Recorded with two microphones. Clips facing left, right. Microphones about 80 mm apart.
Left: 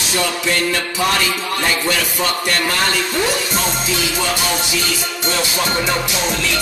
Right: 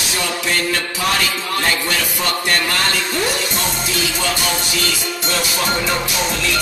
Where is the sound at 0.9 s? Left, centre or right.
Centre.